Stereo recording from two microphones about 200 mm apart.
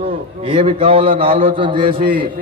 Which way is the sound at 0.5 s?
30° right (ahead or behind).